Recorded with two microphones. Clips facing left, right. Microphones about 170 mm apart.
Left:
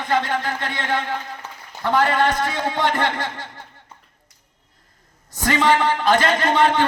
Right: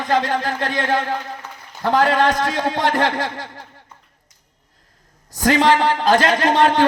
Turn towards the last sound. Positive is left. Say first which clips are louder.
# right 3 dB
turn(degrees=-40)  # may be behind; listen again after turning